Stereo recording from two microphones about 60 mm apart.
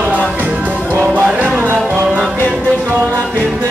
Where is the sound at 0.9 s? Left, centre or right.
Right.